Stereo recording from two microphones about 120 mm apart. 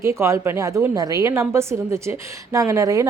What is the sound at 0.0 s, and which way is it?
A woman's voice, 25° right (ahead or behind).